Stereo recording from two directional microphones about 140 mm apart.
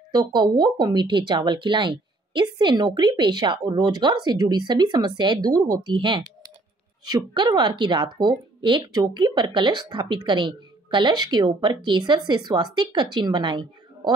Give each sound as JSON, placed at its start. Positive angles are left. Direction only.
{"t": 0.1, "sound": "speech", "side_deg": -30}